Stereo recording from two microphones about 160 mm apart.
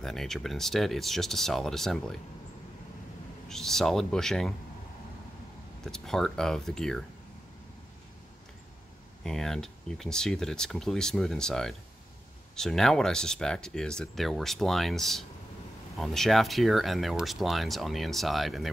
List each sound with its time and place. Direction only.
0.0 s speech: centre (ahead or behind)
3.4 s speech: 5° left (ahead or behind)
5.9 s speech: 5° left (ahead or behind)
9.2 s speech: 5° left (ahead or behind)